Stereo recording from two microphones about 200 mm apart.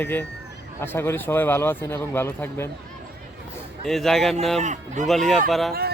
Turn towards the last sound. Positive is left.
turn(degrees=0)  # may be behind; listen again after turning